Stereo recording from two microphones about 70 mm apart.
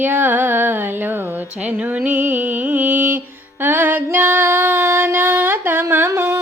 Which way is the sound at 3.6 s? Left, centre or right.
Right.